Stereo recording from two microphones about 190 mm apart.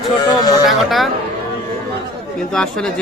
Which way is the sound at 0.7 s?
Centre (ahead or behind).